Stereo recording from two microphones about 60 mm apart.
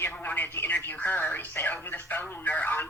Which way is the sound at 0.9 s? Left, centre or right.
Left.